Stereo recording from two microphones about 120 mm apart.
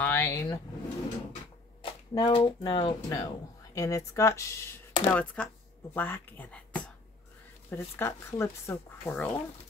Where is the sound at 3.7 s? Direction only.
25° left (ahead or behind).